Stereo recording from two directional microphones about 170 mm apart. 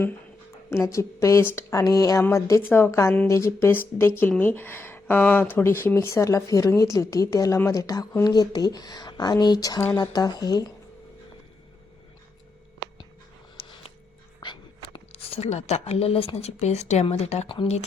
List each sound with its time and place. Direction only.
0.7 s speech: 15° left (ahead or behind)
13.6 s a sound: 35° left (ahead or behind)
14.4 s speech: 25° left (ahead or behind)